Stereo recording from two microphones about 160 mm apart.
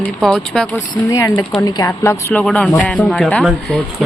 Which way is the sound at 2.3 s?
5° left (ahead or behind).